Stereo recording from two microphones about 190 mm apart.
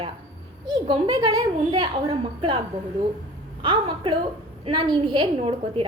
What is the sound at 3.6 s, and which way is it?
A woman's voice, 25° right (ahead or behind).